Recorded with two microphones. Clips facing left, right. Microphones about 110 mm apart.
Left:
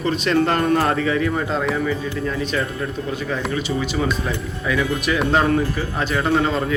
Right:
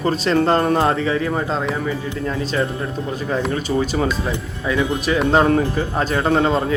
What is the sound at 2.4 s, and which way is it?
Speech, 30° right (ahead or behind).